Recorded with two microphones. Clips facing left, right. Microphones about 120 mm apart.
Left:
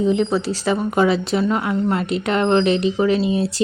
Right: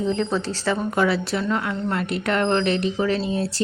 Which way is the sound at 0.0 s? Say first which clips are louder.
Left 5 dB; 15° left (ahead or behind).